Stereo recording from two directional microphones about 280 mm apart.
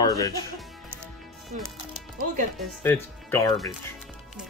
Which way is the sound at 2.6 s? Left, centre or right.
Centre.